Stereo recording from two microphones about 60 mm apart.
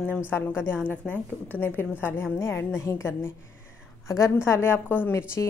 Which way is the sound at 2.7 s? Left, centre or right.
Left.